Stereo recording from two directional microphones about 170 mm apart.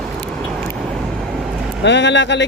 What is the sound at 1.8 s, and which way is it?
Speech, 90° left.